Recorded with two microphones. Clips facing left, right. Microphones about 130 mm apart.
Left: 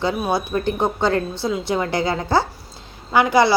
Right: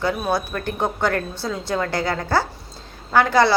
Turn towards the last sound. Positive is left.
turn(degrees=15)  # may be behind; listen again after turning